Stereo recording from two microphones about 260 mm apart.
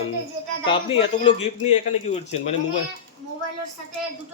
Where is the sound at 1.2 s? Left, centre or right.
Left.